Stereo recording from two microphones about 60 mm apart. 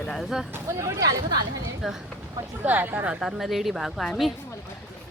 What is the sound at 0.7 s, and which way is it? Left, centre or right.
Speech, right.